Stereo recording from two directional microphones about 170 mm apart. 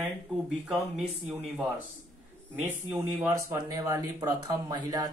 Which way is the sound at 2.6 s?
10° right (ahead or behind).